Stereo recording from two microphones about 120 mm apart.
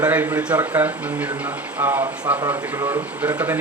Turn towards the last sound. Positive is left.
turn(degrees=-15)  # may be behind; listen again after turning